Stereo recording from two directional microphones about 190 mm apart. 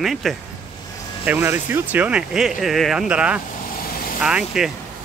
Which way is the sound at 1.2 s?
10° right (ahead or behind).